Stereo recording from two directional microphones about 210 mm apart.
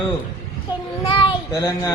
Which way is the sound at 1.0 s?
25° left (ahead or behind).